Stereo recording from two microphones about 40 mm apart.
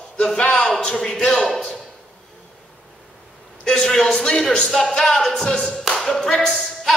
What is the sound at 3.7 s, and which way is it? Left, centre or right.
A man's voice, centre.